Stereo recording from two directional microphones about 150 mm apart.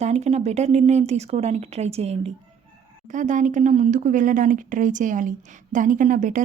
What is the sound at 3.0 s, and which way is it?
A woman's voice, 55° right (ahead or behind).